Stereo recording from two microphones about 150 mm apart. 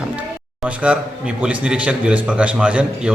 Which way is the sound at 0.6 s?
5° right (ahead or behind).